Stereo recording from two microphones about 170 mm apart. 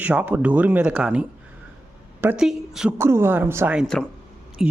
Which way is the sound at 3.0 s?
15° right (ahead or behind).